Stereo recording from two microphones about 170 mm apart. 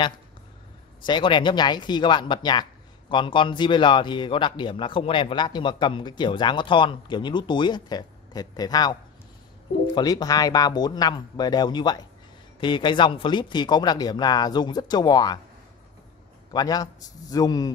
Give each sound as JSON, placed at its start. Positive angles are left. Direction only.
{"t": 1.0, "sound": "a man's voice", "side_deg": 30}
{"t": 9.9, "sound": "a man's voice", "side_deg": 25}
{"t": 16.5, "sound": "a man's voice", "side_deg": 20}